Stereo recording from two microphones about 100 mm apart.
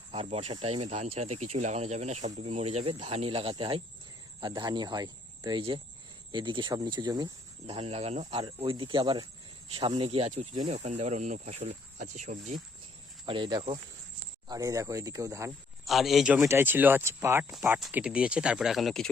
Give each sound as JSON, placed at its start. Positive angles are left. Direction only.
{"t": 0.1, "sound": "speech", "side_deg": -75}
{"t": 7.7, "sound": "speech", "side_deg": -85}
{"t": 8.4, "sound": "speech", "side_deg": -45}
{"t": 9.7, "sound": "speech", "side_deg": -65}
{"t": 13.2, "sound": "speech", "side_deg": -50}
{"t": 15.8, "sound": "a man's voice", "side_deg": 0}
{"t": 16.5, "sound": "speech", "side_deg": -20}
{"t": 17.9, "sound": "speech", "side_deg": -10}